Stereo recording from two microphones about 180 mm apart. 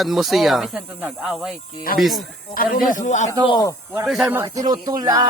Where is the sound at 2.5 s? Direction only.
50° left (ahead or behind).